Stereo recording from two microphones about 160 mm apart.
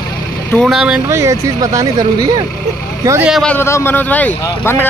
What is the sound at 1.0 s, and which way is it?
Speech, 20° right (ahead or behind).